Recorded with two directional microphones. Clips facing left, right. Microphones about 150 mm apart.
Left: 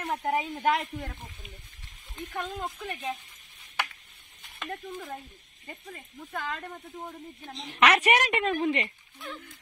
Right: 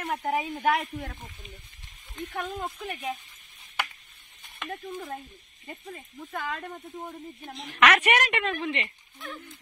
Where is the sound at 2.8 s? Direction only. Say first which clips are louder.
Right 1 dB; 15° right (ahead or behind).